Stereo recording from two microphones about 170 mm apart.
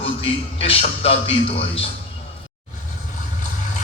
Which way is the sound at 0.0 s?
35° left (ahead or behind).